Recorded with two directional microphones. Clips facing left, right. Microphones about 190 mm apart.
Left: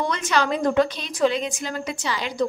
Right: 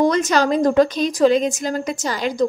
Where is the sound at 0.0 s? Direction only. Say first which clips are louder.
Right 7 dB; 40° right (ahead or behind).